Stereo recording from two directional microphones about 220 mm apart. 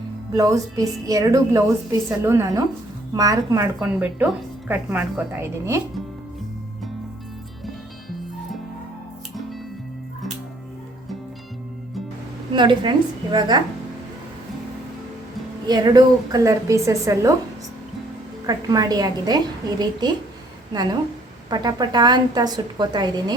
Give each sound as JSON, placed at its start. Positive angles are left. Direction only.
{"t": 0.3, "sound": "speech", "side_deg": -15}
{"t": 12.5, "sound": "a woman's voice", "side_deg": -20}
{"t": 15.6, "sound": "speech", "side_deg": -20}
{"t": 18.4, "sound": "a woman's voice", "side_deg": -15}
{"t": 21.5, "sound": "a woman's voice", "side_deg": -20}